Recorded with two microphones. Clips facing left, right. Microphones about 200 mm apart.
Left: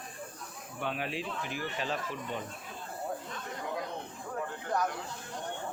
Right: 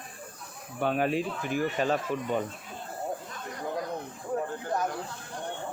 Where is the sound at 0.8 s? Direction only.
45° right (ahead or behind).